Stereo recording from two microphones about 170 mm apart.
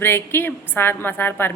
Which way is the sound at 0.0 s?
15° left (ahead or behind).